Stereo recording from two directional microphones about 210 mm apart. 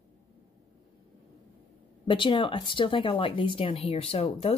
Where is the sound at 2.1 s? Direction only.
25° left (ahead or behind).